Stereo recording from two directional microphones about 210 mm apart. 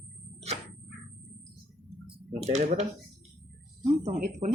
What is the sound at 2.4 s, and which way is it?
Speech, 35° right (ahead or behind).